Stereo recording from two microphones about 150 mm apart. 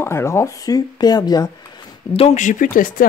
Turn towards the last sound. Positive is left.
turn(degrees=65)  # may be behind; listen again after turning